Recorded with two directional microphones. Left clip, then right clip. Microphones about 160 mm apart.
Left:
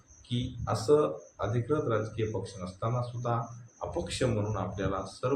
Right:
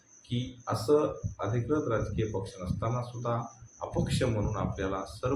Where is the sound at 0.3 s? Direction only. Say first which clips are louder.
Left 1 dB; 5° right (ahead or behind).